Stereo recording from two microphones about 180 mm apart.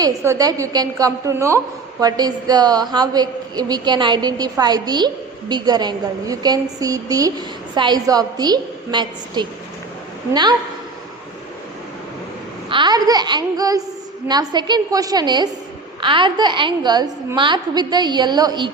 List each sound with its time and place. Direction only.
0.0 s a woman's voice: 15° right (ahead or behind)
12.7 s a woman's voice: 25° right (ahead or behind)